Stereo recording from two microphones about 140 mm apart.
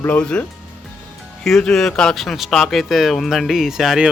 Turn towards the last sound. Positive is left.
turn(degrees=0)  # may be behind; listen again after turning